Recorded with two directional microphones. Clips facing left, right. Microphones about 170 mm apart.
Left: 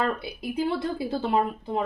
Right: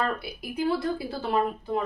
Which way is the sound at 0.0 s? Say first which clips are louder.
Left 2 dB; 25° left (ahead or behind).